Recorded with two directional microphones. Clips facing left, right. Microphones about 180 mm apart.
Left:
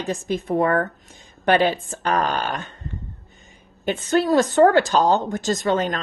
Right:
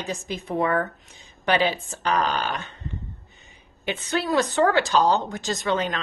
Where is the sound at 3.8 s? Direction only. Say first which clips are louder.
Left 6 dB; 45° left (ahead or behind).